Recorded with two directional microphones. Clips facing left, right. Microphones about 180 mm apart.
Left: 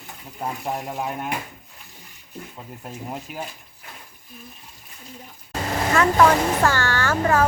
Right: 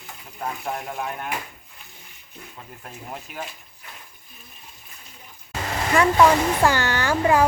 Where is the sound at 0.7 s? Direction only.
20° left (ahead or behind).